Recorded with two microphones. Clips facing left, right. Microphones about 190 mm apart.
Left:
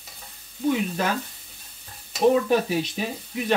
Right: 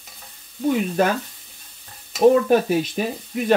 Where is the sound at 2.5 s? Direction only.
50° right (ahead or behind).